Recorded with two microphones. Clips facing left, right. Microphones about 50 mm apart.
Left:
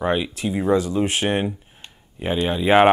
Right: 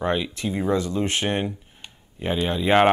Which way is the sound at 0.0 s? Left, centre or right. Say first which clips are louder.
Left 2 dB; centre.